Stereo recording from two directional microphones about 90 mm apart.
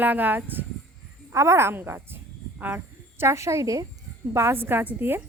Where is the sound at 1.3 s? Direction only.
30° right (ahead or behind).